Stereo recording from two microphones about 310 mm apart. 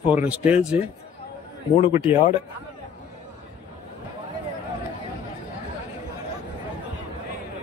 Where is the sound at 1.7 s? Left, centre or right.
Centre.